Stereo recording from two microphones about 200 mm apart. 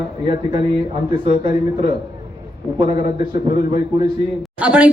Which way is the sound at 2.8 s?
25° right (ahead or behind).